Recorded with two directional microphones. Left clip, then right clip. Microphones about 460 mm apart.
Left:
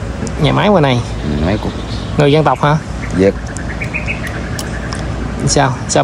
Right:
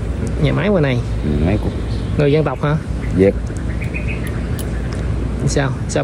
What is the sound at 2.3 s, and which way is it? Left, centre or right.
Speech, left.